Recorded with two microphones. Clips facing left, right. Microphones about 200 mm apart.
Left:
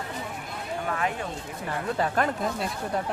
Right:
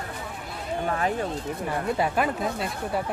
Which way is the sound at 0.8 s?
35° right (ahead or behind).